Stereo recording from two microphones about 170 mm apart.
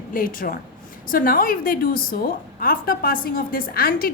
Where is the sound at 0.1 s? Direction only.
55° left (ahead or behind).